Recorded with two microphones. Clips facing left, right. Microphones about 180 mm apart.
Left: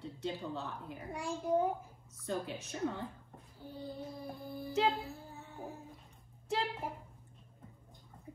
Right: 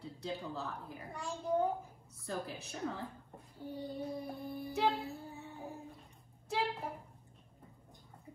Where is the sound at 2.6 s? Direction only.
Centre (ahead or behind).